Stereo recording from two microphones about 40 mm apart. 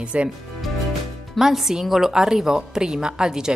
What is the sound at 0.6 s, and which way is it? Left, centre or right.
A woman's voice, centre.